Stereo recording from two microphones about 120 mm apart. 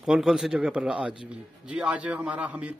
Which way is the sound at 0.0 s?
5° right (ahead or behind).